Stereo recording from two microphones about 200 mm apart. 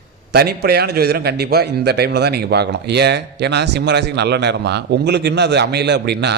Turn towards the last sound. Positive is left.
turn(degrees=-60)  # may be behind; listen again after turning